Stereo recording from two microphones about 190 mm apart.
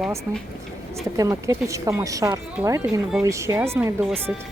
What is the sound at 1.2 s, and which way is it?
Speech, 15° right (ahead or behind).